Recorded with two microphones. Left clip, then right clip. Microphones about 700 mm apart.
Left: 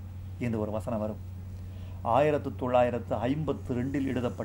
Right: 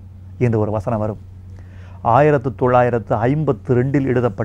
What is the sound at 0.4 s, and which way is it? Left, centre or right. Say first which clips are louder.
A man's voice: right 13 dB; right.